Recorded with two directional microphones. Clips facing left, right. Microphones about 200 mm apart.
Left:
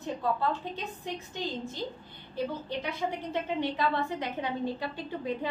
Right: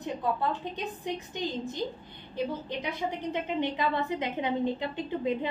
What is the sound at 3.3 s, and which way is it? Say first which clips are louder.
A woman's voice: right 2 dB; 20° right (ahead or behind).